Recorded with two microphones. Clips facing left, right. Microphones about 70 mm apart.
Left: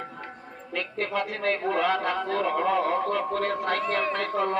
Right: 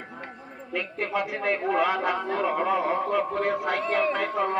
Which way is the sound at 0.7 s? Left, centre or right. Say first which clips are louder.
Even; centre.